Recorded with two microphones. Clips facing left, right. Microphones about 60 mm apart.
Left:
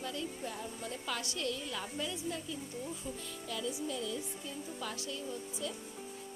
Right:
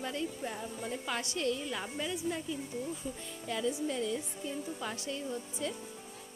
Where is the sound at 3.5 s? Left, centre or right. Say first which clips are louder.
Right 5 dB; right.